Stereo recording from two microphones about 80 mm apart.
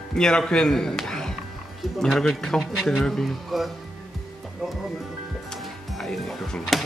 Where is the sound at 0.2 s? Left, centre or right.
Centre.